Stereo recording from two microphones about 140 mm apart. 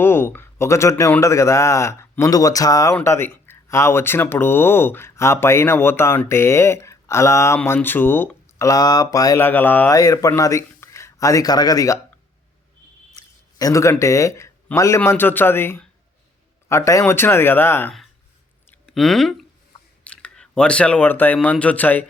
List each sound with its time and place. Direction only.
0.0 s a man's voice: 15° left (ahead or behind)
9.9 s speech: 25° left (ahead or behind)
13.6 s a man's voice: 25° left (ahead or behind)
18.7 s a sound: centre (ahead or behind)
21.4 s speech: 10° left (ahead or behind)